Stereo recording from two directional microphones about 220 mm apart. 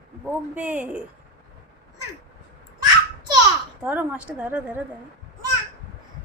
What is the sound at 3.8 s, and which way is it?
Speech, 5° right (ahead or behind).